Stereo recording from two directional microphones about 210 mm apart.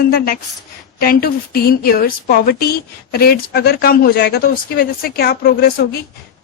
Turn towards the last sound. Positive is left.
turn(degrees=45)  # may be behind; listen again after turning